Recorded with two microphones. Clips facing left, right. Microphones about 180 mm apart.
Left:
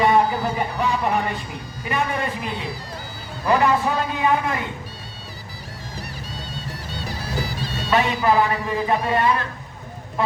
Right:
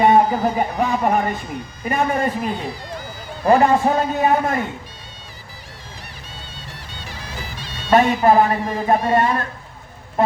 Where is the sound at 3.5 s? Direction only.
45° right (ahead or behind).